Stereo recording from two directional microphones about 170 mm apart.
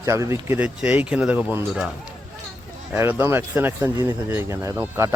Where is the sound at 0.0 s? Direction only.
15° right (ahead or behind).